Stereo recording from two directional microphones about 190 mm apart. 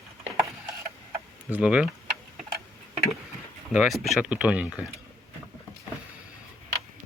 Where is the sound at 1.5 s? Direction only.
5° right (ahead or behind).